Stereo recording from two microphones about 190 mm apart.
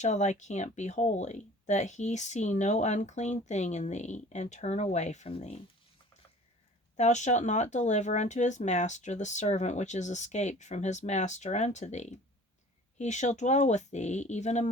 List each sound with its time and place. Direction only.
0.0 s speech: 40° left (ahead or behind)
6.9 s speech: 40° left (ahead or behind)